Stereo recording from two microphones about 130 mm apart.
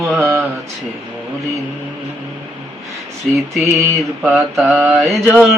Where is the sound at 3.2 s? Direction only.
Centre (ahead or behind).